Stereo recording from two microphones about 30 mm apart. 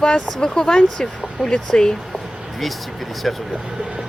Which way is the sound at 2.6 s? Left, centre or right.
Centre.